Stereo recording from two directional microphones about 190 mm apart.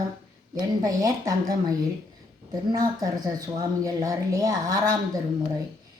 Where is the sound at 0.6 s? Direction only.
20° right (ahead or behind).